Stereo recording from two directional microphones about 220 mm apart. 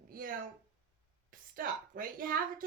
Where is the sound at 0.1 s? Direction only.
40° right (ahead or behind).